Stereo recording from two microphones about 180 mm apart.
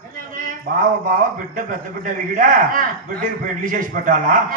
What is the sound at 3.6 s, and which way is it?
Speech, 50° right (ahead or behind).